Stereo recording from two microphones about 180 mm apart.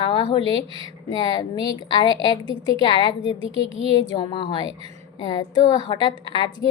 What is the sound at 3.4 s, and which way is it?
Speech, 30° right (ahead or behind).